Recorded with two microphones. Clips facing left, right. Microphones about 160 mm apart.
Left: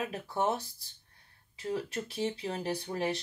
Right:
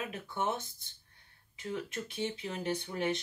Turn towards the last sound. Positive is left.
turn(degrees=35)  # may be behind; listen again after turning